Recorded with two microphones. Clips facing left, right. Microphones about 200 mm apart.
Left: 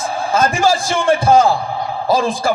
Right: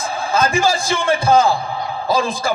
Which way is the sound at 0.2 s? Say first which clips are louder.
Left 1 dB; 45° left (ahead or behind).